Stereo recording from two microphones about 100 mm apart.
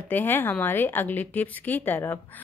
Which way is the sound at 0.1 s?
20° left (ahead or behind).